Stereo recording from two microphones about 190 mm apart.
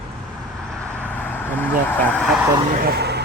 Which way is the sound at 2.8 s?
60° right (ahead or behind).